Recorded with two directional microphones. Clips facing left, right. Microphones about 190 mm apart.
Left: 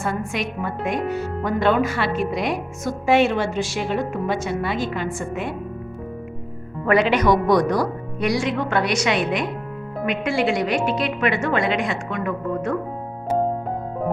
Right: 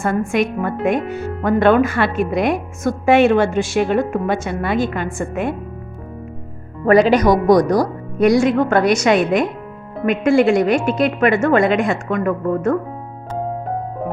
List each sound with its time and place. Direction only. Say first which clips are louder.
0.0 s speech: right 7 dB; 50° right (ahead or behind)
6.8 s speech: right 5 dB; 40° right (ahead or behind)